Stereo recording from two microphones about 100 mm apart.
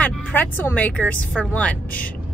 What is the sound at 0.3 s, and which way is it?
Speech, 20° left (ahead or behind).